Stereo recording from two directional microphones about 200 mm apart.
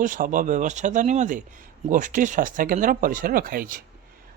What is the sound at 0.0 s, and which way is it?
Speech, 40° right (ahead or behind).